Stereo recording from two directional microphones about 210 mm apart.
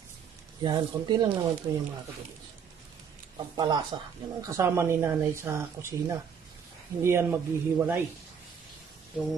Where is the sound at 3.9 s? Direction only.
25° right (ahead or behind).